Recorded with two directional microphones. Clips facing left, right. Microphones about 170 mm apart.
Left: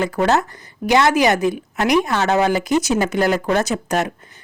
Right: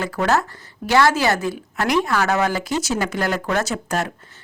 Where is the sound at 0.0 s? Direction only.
20° left (ahead or behind).